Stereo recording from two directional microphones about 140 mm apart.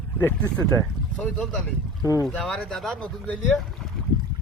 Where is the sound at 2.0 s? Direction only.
25° left (ahead or behind).